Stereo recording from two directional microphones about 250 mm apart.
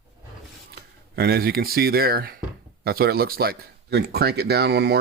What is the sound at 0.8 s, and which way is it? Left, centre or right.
Speech, right.